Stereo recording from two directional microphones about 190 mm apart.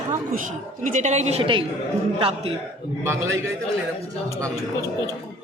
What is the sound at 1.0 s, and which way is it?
Speech, 35° right (ahead or behind).